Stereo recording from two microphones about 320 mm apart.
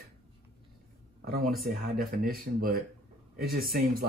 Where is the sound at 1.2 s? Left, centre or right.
Right.